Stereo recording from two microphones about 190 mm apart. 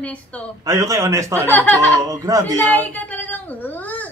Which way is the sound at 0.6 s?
15° right (ahead or behind).